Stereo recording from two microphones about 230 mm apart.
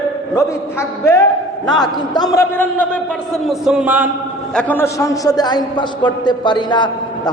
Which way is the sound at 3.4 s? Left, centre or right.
Centre.